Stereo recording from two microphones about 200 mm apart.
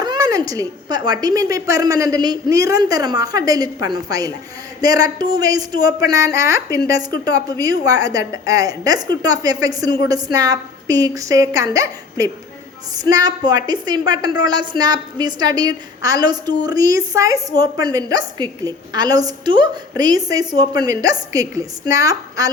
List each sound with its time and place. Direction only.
0.0 s a woman's voice: 20° right (ahead or behind)